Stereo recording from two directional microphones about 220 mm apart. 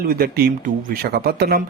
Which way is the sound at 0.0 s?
40° right (ahead or behind).